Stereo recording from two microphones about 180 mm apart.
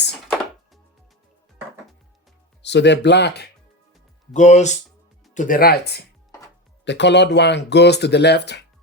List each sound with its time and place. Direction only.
0.1 s music: centre (ahead or behind)
2.6 s speech: 75° left (ahead or behind)
4.4 s speech: 40° left (ahead or behind); by 8.6 s 70° left (ahead or behind)